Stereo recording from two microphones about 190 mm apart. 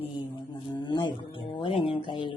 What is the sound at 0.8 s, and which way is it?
Music, 25° left (ahead or behind).